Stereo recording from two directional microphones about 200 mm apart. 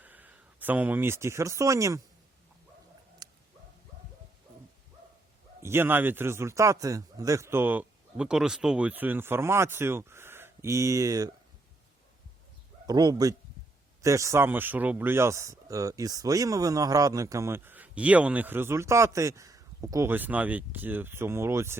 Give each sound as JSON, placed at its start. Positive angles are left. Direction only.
{"t": 0.0, "sound": "speech", "side_deg": -10}
{"t": 3.2, "sound": "dog", "side_deg": -20}
{"t": 5.6, "sound": "a man's voice", "side_deg": -10}
{"t": 12.9, "sound": "a man's voice", "side_deg": -20}